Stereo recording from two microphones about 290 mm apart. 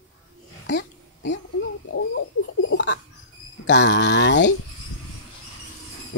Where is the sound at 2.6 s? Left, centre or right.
Left.